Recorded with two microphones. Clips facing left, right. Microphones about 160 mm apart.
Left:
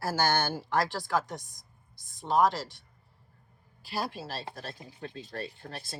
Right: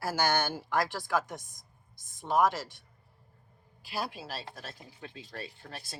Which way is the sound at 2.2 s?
15° right (ahead or behind).